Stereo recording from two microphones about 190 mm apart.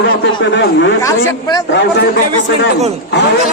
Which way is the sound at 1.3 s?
20° left (ahead or behind).